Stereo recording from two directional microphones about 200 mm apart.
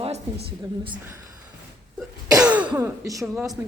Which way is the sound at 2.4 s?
5° right (ahead or behind).